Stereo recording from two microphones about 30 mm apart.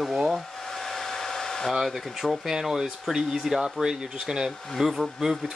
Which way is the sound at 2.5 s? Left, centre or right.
Centre.